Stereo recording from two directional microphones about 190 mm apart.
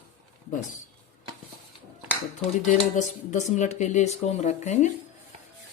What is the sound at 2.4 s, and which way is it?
Speech, 40° left (ahead or behind).